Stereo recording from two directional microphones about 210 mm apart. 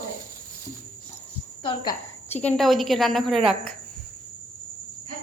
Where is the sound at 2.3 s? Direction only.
5° left (ahead or behind).